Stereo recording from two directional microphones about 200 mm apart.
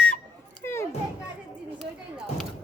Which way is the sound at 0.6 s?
15° left (ahead or behind).